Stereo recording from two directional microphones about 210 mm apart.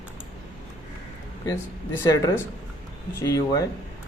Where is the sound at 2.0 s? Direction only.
15° left (ahead or behind).